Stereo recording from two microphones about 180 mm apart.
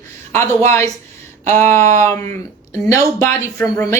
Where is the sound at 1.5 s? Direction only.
15° left (ahead or behind).